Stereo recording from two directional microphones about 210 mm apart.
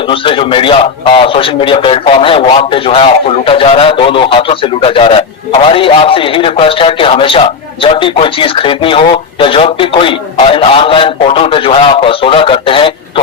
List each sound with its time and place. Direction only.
0.1 s a man's voice: 25° left (ahead or behind)